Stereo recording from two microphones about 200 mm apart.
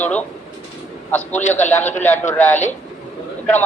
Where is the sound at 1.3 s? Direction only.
35° left (ahead or behind).